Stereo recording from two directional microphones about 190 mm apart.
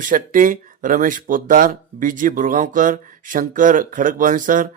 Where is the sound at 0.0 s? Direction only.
45° right (ahead or behind).